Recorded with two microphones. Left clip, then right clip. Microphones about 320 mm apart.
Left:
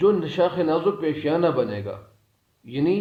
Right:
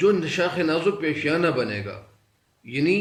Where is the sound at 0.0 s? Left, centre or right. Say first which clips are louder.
Left 1 dB; centre.